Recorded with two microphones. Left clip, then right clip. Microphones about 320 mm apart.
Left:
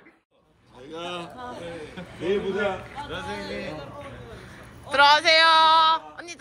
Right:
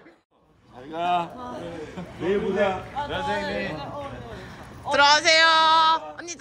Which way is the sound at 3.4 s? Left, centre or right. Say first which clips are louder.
Right 4 dB; centre.